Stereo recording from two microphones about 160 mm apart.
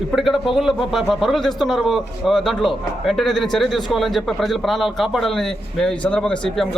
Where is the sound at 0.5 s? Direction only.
Centre (ahead or behind).